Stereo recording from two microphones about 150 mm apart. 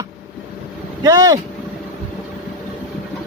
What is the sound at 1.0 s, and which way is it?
Speech, 25° right (ahead or behind).